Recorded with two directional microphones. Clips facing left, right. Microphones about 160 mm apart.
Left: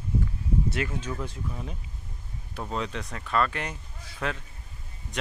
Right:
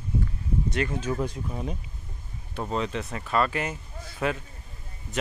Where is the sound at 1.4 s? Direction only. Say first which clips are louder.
Right 4 dB; 25° right (ahead or behind).